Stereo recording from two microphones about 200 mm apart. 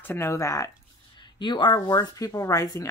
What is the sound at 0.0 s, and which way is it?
Speech, 10° left (ahead or behind).